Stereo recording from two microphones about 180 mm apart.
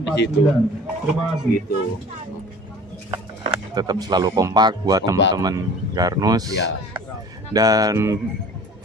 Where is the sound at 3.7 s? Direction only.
20° right (ahead or behind).